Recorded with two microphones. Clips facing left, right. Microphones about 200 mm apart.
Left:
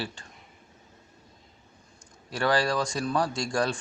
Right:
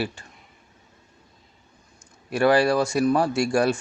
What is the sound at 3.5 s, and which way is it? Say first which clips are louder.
Speech: right 6 dB; 10° right (ahead or behind).